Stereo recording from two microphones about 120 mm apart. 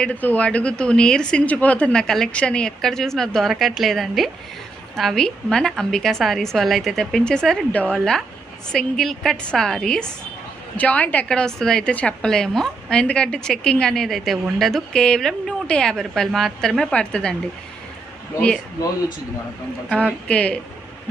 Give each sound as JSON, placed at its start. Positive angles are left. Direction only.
{"t": 0.0, "sound": "a woman's voice", "side_deg": 15}
{"t": 18.3, "sound": "a woman's voice", "side_deg": 10}
{"t": 20.2, "sound": "a woman's voice", "side_deg": 10}